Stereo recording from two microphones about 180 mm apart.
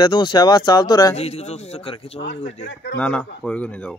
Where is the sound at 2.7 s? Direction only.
80° left.